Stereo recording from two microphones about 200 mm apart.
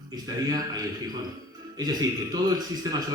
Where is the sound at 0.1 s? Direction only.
15° right (ahead or behind).